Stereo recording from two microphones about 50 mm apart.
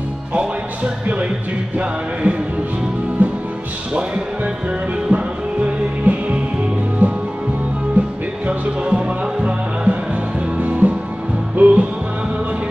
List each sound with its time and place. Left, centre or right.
3.2 s music: right
5.1 s music: right